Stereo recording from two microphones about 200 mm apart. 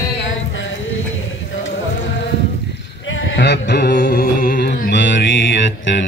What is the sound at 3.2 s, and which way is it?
Music, 65° left (ahead or behind).